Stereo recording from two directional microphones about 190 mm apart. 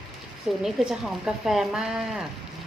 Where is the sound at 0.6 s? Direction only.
Centre (ahead or behind).